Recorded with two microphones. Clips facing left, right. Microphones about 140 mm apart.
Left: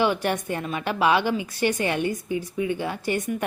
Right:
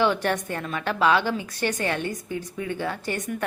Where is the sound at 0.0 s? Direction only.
10° left (ahead or behind).